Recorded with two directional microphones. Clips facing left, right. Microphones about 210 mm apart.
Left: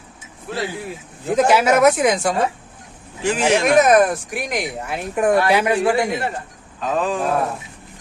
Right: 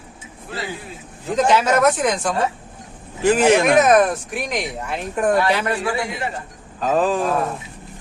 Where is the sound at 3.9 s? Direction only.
5° left (ahead or behind).